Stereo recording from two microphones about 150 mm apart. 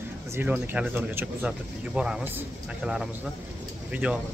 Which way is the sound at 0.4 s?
10° right (ahead or behind).